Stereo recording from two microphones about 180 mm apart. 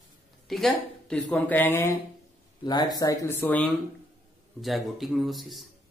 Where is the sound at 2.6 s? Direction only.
25° left (ahead or behind); by 5.7 s centre (ahead or behind).